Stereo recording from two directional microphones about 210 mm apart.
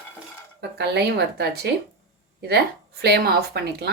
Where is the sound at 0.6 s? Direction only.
55° right (ahead or behind).